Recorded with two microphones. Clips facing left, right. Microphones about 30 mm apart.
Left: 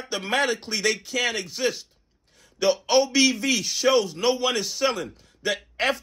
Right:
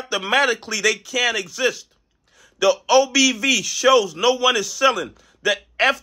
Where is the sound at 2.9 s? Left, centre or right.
Right.